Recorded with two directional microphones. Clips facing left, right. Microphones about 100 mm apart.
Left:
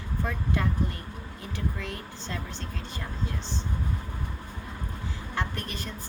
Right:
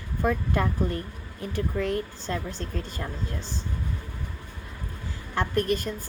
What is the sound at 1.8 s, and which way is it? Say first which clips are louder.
Speech: right 9 dB; 45° right (ahead or behind).